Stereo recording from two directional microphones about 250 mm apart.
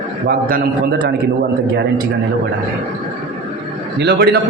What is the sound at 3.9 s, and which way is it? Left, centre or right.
Speech, right.